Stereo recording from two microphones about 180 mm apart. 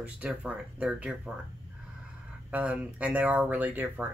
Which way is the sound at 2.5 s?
5° right (ahead or behind).